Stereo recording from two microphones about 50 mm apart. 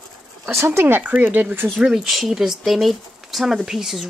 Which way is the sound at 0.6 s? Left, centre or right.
Right.